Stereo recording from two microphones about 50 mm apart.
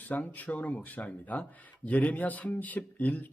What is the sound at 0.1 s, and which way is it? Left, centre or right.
A man's voice, left.